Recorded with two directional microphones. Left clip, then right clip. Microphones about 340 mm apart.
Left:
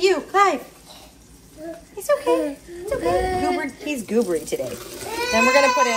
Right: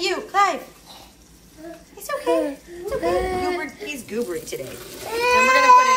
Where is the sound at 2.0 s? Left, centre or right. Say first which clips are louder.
Left 3 dB; centre.